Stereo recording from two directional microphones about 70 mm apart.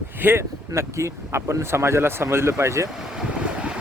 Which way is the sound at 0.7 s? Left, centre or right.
Right.